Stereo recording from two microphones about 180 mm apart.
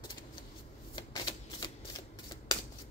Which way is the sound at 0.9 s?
25° left (ahead or behind).